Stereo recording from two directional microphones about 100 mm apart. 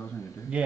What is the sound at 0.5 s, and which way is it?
Speech, 10° right (ahead or behind).